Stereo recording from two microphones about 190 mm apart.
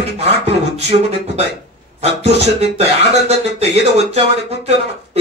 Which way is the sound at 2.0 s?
35° right (ahead or behind).